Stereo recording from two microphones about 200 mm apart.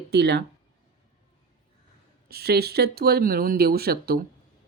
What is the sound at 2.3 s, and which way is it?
Speech, 50° right (ahead or behind).